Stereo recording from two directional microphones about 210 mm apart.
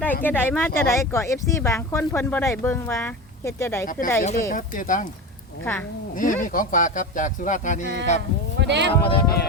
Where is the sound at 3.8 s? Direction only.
40° left (ahead or behind).